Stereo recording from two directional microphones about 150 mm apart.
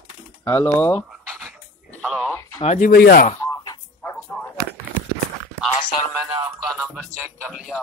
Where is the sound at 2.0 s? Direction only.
Centre (ahead or behind).